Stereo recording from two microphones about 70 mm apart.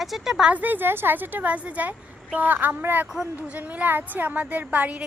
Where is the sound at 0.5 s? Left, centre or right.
Right.